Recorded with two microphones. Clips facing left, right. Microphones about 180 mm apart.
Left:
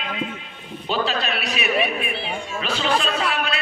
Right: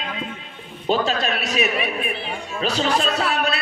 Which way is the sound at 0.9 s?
45° right (ahead or behind).